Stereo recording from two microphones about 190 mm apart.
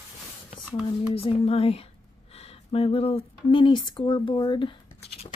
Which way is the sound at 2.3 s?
30° left (ahead or behind).